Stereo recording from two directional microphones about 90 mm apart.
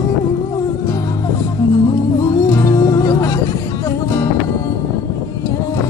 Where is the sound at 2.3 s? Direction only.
40° left (ahead or behind).